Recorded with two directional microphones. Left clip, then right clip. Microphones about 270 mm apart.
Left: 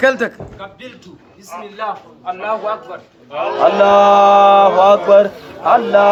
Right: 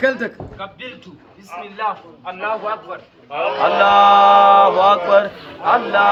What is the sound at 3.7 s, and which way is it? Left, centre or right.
Speech, left.